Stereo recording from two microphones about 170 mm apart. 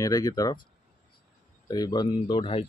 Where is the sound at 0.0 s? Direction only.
20° left (ahead or behind).